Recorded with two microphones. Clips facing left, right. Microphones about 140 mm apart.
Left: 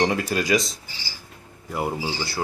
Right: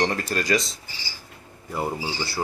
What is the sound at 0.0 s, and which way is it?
Speech, 10° left (ahead or behind).